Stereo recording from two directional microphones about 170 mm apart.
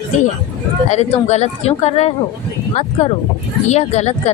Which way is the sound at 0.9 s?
40° left (ahead or behind).